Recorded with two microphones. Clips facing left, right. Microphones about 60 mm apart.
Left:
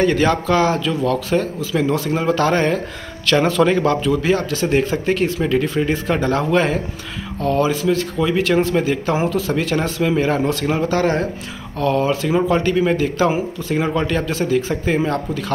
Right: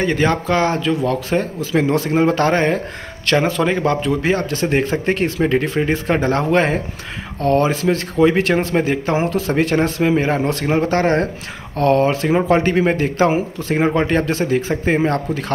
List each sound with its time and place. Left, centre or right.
0.0 s speech: right
12.1 s speech: right
13.7 s speech: right
15.0 s speech: right